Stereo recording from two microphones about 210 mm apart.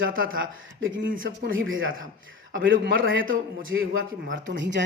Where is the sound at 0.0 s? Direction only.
70° right (ahead or behind).